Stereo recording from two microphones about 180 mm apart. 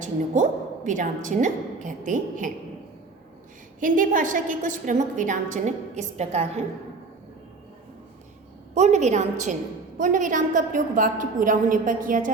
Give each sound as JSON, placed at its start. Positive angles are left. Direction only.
{"t": 0.4, "sound": "a woman's voice", "side_deg": -45}
{"t": 3.8, "sound": "a woman's voice", "side_deg": -50}
{"t": 8.7, "sound": "a woman's voice", "side_deg": -40}